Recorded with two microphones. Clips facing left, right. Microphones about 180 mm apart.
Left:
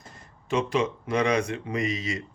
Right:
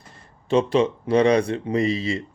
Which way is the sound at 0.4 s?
30° right (ahead or behind).